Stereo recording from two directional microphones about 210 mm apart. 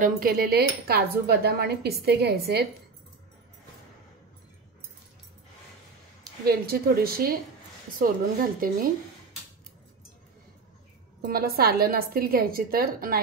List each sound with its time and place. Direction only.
0.0 s cutlery: 45° right (ahead or behind)
6.4 s cutlery: 50° right (ahead or behind)
11.1 s cutlery: 45° right (ahead or behind)